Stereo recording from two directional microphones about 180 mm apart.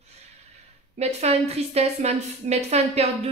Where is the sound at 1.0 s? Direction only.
35° right (ahead or behind).